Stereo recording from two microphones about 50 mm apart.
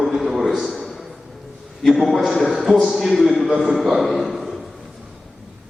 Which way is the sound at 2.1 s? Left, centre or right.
Centre.